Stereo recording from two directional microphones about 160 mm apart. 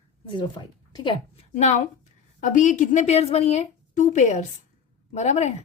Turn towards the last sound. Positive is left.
turn(degrees=45)  # may be behind; listen again after turning